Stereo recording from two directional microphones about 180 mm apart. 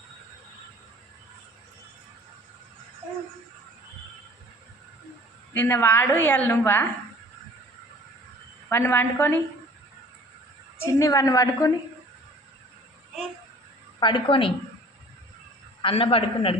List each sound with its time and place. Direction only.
5.5 s a woman's voice: 10° left (ahead or behind)
8.7 s a woman's voice: 10° left (ahead or behind)
10.8 s a woman's voice: 15° left (ahead or behind)
14.0 s a woman's voice: 25° left (ahead or behind)
15.8 s a man's voice: 30° left (ahead or behind)